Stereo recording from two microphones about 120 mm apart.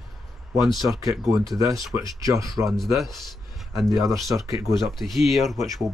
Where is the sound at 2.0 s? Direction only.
30° right (ahead or behind).